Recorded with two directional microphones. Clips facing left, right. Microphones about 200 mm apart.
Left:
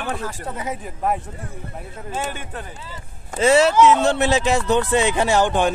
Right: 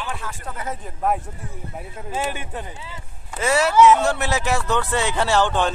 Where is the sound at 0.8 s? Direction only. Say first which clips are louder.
Right 1 dB; centre (ahead or behind).